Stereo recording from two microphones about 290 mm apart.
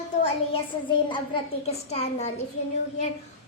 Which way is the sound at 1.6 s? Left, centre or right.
Left.